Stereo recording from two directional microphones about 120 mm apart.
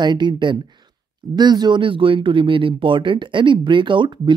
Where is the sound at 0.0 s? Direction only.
40° right (ahead or behind).